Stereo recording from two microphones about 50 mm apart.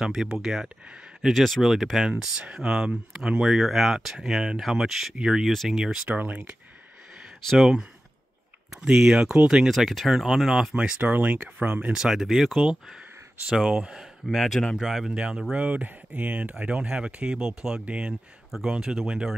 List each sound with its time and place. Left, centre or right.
0.0 s speech: centre
1.3 s speech: centre
6.0 s speech: right
7.5 s speech: centre
8.9 s speech: centre
9.7 s speech: centre
10.8 s speech: right
11.9 s speech: centre
14.2 s speech: centre
14.8 s speech: centre
15.5 s speech: right
16.5 s speech: centre
17.8 s speech: right
18.5 s speech: centre